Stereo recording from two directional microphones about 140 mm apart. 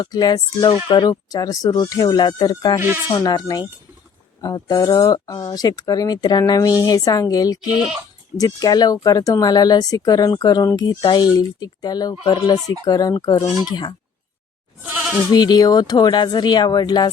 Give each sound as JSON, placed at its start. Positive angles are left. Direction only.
{"t": 0.0, "sound": "speech", "side_deg": 30}
{"t": 7.7, "sound": "speech", "side_deg": -5}
{"t": 8.4, "sound": "speech", "side_deg": 30}
{"t": 14.8, "sound": "goat", "side_deg": -15}
{"t": 15.3, "sound": "speech", "side_deg": 30}